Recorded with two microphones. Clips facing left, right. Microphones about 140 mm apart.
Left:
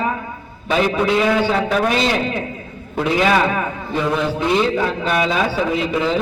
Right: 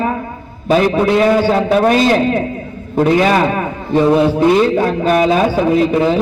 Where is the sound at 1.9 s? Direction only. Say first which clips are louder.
Right 7 dB; 45° right (ahead or behind).